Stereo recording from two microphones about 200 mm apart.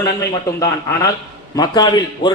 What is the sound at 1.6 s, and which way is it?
Speech, 20° left (ahead or behind).